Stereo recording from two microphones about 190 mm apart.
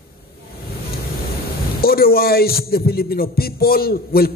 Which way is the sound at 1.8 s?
55° left (ahead or behind).